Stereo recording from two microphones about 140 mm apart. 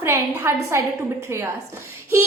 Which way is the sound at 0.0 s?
20° right (ahead or behind).